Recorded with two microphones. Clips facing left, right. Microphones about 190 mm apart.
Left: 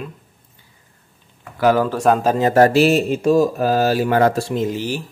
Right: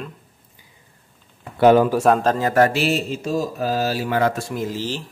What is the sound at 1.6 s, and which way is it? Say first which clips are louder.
Speech: right 3 dB; 25° right (ahead or behind).